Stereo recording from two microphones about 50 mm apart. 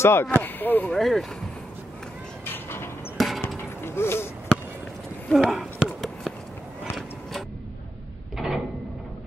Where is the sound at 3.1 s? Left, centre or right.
Centre.